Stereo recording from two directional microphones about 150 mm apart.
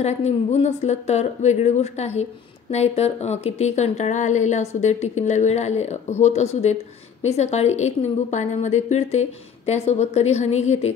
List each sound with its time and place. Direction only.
0.0 s speech: 45° left (ahead or behind)